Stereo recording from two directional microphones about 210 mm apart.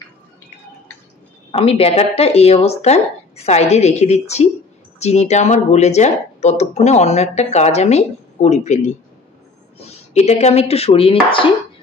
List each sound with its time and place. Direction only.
1.5 s speech: 30° left (ahead or behind)